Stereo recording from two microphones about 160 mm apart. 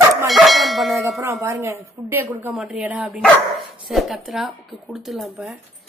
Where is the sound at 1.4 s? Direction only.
15° right (ahead or behind); by 5.6 s centre (ahead or behind).